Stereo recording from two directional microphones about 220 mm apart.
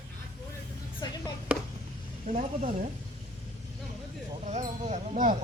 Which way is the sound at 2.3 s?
35° right (ahead or behind).